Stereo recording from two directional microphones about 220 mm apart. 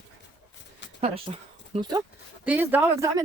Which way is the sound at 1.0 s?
25° right (ahead or behind).